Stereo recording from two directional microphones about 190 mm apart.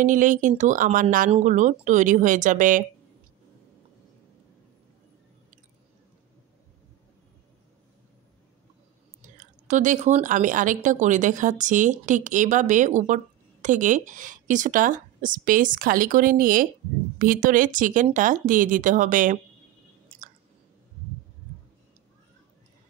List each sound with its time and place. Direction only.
0.0 s a woman's voice: 45° right (ahead or behind)
9.2 s a woman's voice: 40° right (ahead or behind)